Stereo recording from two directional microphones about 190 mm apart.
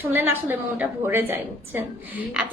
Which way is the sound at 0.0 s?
10° right (ahead or behind).